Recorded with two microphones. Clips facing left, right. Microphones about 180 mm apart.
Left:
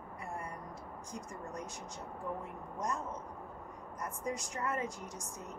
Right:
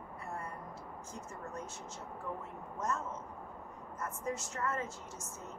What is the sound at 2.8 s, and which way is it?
Speech, 15° left (ahead or behind).